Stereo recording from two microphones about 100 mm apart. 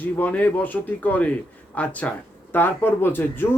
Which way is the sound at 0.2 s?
15° left (ahead or behind).